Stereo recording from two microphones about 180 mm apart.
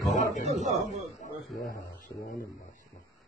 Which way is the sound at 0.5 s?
40° right (ahead or behind).